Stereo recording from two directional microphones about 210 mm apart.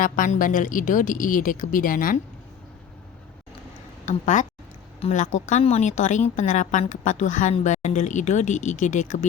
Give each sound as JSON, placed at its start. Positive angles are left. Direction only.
{"t": 0.0, "sound": "speech", "side_deg": 40}
{"t": 4.0, "sound": "a woman's voice", "side_deg": 35}